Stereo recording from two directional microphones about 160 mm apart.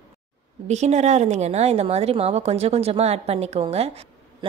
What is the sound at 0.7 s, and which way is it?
A woman's voice, 45° right (ahead or behind).